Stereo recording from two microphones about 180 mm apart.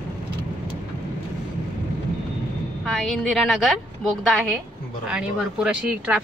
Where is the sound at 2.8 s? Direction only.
Centre (ahead or behind).